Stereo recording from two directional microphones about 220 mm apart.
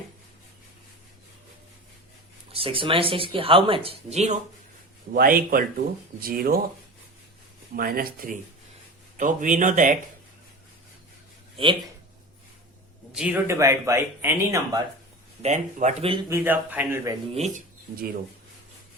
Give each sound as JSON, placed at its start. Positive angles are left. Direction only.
{"t": 2.5, "sound": "speech", "side_deg": -25}
{"t": 5.1, "sound": "speech", "side_deg": -40}
{"t": 7.8, "sound": "speech", "side_deg": -40}
{"t": 11.5, "sound": "speech", "side_deg": -20}
{"t": 13.1, "sound": "speech", "side_deg": -5}
{"t": 15.4, "sound": "speech", "side_deg": -30}
{"t": 16.3, "sound": "speech", "side_deg": -10}
{"t": 17.3, "sound": "speech", "side_deg": -30}